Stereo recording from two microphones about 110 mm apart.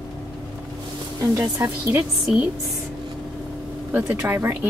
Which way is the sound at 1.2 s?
25° right (ahead or behind).